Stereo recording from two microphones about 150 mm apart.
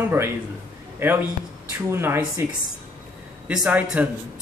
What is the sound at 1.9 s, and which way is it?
Speech, 15° right (ahead or behind).